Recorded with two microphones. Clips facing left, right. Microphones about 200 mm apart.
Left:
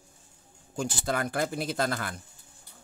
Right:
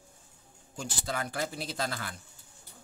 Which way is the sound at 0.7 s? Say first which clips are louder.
Left 6 dB; 50° left (ahead or behind).